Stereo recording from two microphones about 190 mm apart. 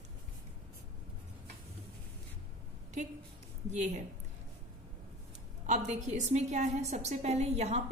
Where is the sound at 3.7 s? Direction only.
35° right (ahead or behind).